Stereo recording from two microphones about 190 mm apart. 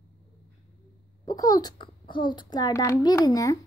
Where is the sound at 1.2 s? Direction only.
20° left (ahead or behind).